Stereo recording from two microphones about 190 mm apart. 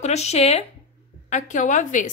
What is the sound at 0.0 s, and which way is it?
Speech, 35° left (ahead or behind).